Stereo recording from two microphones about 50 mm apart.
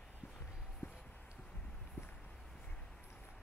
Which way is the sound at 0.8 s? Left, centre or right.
Left.